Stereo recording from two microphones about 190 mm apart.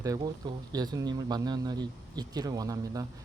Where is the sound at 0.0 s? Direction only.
20° right (ahead or behind).